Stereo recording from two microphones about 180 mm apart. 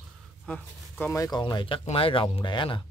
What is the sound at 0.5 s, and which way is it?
Speech, 10° left (ahead or behind).